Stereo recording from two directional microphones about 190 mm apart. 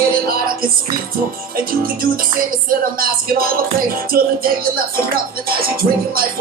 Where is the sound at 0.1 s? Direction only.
50° right (ahead or behind).